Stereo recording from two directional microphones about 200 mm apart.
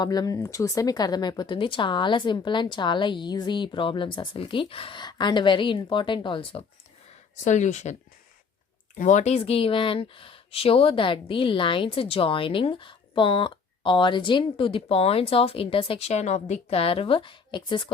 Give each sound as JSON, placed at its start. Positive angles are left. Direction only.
{"t": 0.0, "sound": "speech", "side_deg": 20}
{"t": 7.3, "sound": "speech", "side_deg": 35}
{"t": 9.0, "sound": "speech", "side_deg": 35}